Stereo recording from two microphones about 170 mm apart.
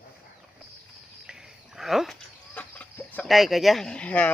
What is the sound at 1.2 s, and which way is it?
Livestock, 5° right (ahead or behind).